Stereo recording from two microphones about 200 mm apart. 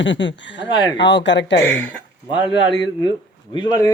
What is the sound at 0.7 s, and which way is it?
Speech, 20° left (ahead or behind).